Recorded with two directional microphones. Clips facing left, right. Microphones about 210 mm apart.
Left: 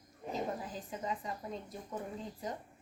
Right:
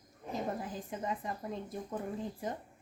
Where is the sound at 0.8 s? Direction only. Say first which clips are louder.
Even; 55° right (ahead or behind).